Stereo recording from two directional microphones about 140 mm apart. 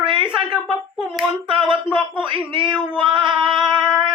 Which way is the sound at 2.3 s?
35° right (ahead or behind).